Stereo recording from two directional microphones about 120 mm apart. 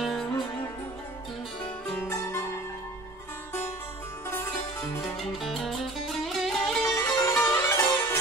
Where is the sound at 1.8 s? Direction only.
20° left (ahead or behind).